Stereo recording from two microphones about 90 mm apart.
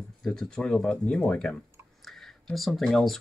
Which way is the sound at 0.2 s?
5° left (ahead or behind).